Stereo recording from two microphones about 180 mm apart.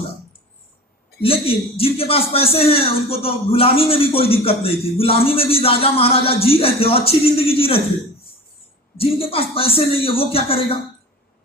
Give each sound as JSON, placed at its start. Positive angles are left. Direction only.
{"t": 1.2, "sound": "speech", "side_deg": 30}
{"t": 9.0, "sound": "speech", "side_deg": 30}